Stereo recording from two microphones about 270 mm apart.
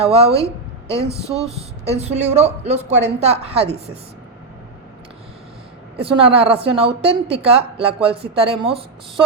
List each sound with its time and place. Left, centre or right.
0.0 s a woman's voice: right
1.5 s a woman's voice: right
6.0 s a woman's voice: right